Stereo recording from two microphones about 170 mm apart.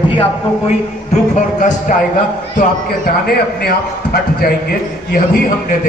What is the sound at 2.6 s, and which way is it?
A man's voice, 60° left (ahead or behind).